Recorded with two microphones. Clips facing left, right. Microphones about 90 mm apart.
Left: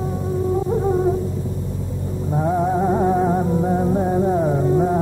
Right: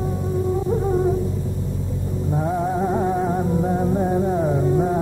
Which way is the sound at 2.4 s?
20° left (ahead or behind).